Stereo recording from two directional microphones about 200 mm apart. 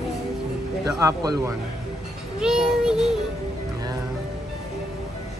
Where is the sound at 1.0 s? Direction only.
15° right (ahead or behind).